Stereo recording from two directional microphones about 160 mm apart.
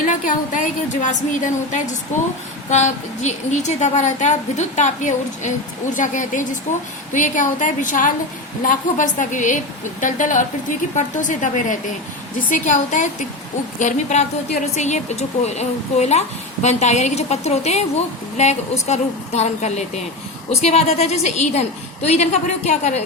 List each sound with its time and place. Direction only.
0.0 s a woman's voice: 55° left (ahead or behind)